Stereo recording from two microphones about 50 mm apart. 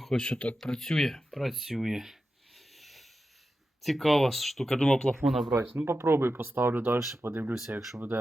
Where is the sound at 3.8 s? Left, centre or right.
Centre.